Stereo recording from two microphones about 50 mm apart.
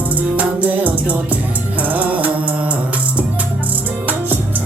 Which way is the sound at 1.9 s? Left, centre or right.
Right.